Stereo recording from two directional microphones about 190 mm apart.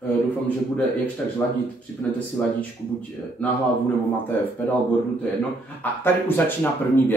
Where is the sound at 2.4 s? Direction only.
10° left (ahead or behind).